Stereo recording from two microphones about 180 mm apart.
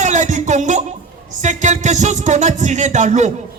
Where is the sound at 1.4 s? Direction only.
40° right (ahead or behind).